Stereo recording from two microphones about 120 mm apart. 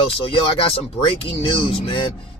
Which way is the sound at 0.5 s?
50° left (ahead or behind).